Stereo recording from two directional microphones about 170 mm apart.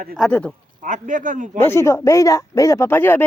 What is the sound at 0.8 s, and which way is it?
Speech, 50° right (ahead or behind).